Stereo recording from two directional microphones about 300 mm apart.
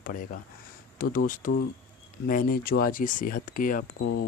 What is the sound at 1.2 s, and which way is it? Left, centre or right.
Speech, left.